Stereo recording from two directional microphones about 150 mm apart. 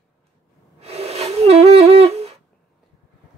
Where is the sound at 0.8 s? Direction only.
45° right (ahead or behind).